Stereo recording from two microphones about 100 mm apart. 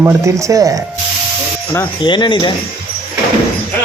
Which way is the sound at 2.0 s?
50° left (ahead or behind).